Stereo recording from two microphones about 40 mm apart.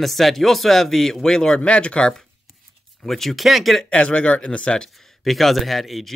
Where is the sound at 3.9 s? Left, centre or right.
Left.